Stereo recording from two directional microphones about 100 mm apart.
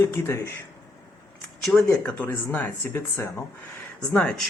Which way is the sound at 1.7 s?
10° left (ahead or behind).